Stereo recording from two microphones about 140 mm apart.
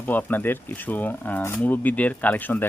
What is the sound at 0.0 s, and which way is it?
Speech, 10° left (ahead or behind).